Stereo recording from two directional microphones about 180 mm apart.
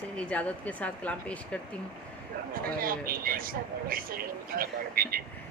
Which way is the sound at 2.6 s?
55° right (ahead or behind).